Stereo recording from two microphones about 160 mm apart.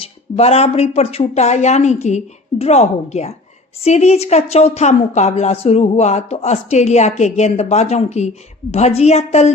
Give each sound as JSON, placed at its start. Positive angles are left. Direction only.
{"t": 0.0, "sound": "a woman's voice", "side_deg": 40}